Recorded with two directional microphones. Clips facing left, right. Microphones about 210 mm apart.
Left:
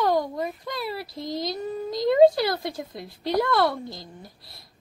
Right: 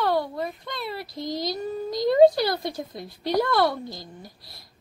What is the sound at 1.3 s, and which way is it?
Child singing, 25° left (ahead or behind).